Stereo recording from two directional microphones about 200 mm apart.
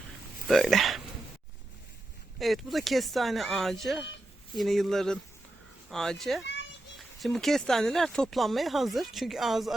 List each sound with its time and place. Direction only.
0.4 s speech: centre (ahead or behind)
2.4 s speech: centre (ahead or behind)
6.4 s children playing: 60° left (ahead or behind)
7.2 s speech: centre (ahead or behind)